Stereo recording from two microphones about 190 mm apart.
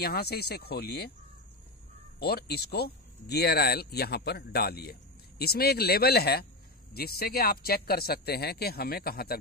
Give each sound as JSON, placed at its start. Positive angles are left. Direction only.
{"t": 0.0, "sound": "speech", "side_deg": 55}
{"t": 2.1, "sound": "speech", "side_deg": 55}